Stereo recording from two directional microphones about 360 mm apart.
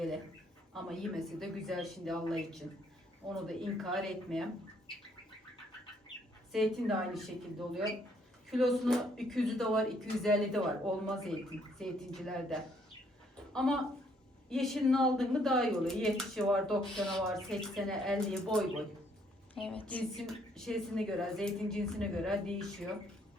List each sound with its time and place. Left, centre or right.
0.7 s a woman's voice: centre
6.5 s a woman's voice: centre
8.4 s a woman's voice: centre